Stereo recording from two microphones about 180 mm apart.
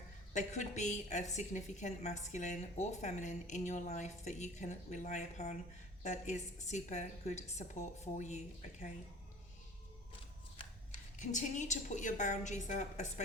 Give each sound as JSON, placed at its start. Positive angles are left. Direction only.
{"t": 0.3, "sound": "a woman's voice", "side_deg": 40}
{"t": 10.9, "sound": "a woman's voice", "side_deg": 40}